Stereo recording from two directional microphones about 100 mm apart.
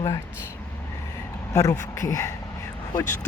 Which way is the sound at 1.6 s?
30° left (ahead or behind).